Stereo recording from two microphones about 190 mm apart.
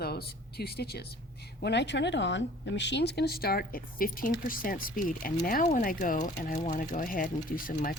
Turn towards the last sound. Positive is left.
turn(degrees=45)  # may be behind; listen again after turning